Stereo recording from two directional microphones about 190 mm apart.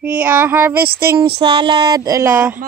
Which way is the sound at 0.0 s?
10° right (ahead or behind).